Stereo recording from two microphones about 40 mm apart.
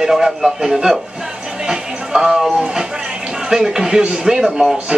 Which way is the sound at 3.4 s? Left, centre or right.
Centre.